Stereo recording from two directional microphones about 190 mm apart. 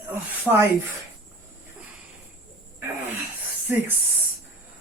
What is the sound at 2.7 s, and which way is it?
Sneeze, 10° right (ahead or behind).